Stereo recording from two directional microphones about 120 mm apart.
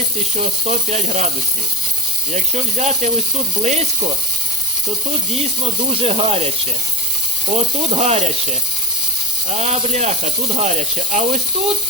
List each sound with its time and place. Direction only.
0.3 s speech: 70° right (ahead or behind)
2.3 s speech: 80° right
5.9 s speech: 55° right (ahead or behind)
7.5 s speech: 65° right (ahead or behind)
9.5 s speech: 70° right (ahead or behind)